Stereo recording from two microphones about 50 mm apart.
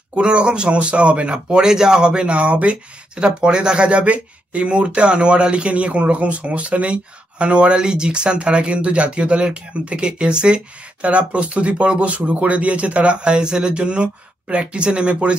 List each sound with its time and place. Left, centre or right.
0.1 s speech: right